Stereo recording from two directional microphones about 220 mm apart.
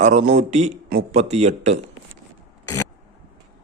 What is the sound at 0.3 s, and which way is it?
A man's voice, 30° right (ahead or behind).